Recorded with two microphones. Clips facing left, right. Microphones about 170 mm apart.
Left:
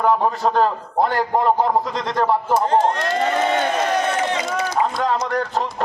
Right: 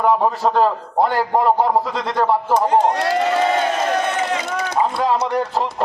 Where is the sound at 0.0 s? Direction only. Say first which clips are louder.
Right 1 dB; 5° right (ahead or behind).